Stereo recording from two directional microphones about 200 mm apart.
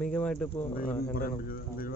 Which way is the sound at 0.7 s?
45° left (ahead or behind).